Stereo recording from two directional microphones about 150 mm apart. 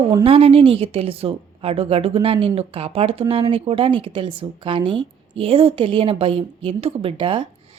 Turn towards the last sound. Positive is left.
turn(degrees=-35)  # may be behind; listen again after turning